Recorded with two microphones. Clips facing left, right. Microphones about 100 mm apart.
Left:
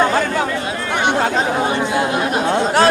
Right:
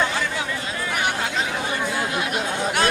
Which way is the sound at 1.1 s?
45° left (ahead or behind).